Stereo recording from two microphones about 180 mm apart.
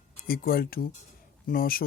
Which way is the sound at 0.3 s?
55° left (ahead or behind).